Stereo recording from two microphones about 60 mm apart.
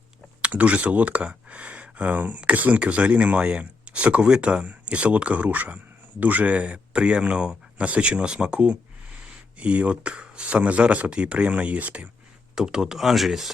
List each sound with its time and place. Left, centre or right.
0.4 s speech: right
12.5 s speech: centre